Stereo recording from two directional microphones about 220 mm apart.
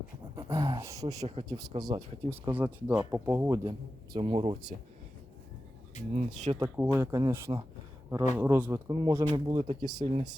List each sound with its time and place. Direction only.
0.3 s a sound: 15° right (ahead or behind)
1.0 s speech: 20° right (ahead or behind)
2.3 s a man's voice: 10° right (ahead or behind)
6.1 s speech: 30° right (ahead or behind)
6.7 s a man's voice: 10° right (ahead or behind)